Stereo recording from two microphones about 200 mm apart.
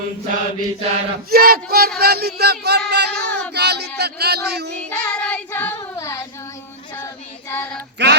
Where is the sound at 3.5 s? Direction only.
55° right (ahead or behind).